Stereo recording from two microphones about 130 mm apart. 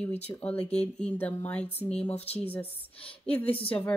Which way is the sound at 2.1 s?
50° left (ahead or behind).